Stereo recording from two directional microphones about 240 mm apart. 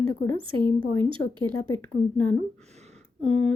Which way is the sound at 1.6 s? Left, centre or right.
Centre.